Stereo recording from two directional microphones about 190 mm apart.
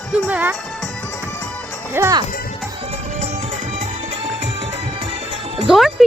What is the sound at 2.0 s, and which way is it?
Speech, 15° right (ahead or behind).